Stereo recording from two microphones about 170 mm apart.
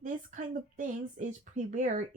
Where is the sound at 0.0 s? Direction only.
50° right (ahead or behind).